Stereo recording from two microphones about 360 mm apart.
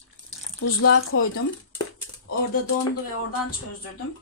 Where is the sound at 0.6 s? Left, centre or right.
Left.